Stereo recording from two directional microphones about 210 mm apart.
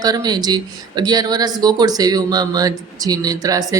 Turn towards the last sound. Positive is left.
turn(degrees=-15)  # may be behind; listen again after turning